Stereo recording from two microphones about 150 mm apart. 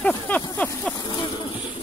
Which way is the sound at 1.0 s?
30° left (ahead or behind).